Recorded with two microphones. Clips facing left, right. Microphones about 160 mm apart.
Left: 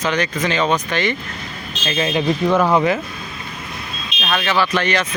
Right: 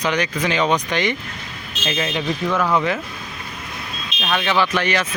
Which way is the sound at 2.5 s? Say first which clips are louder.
Left 4 dB; 30° left (ahead or behind).